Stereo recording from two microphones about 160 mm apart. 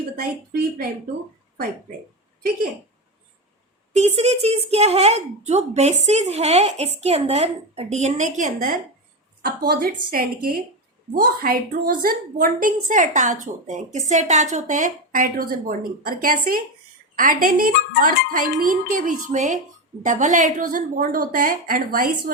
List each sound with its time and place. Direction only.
0.2 s a woman's voice: 75° right (ahead or behind)
3.9 s speech: 45° right (ahead or behind)
9.4 s a woman's voice: 75° right (ahead or behind)